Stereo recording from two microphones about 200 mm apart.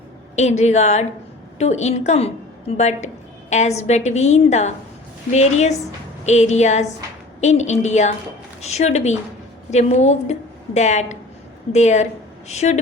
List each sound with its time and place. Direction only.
0.3 s a woman's voice: 35° left (ahead or behind)